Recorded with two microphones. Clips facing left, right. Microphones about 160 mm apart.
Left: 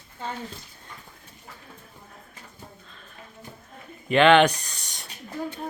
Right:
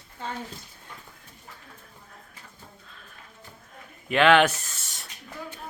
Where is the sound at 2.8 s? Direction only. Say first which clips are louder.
Left 1 dB; 5° right (ahead or behind).